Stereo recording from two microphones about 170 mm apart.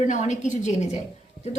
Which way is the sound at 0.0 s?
45° left (ahead or behind).